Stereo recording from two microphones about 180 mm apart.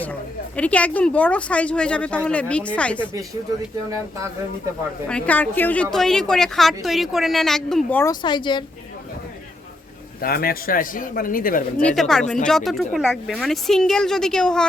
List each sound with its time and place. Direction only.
0.0 s speech: 10° left (ahead or behind)
5.0 s a woman's voice: 5° left (ahead or behind)
8.2 s speech: 25° left (ahead or behind)
10.2 s a man's voice: 55° left (ahead or behind)
11.8 s a woman's voice: 5° left (ahead or behind)